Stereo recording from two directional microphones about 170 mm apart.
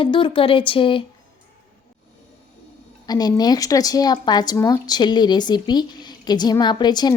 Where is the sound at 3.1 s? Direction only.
25° left (ahead or behind).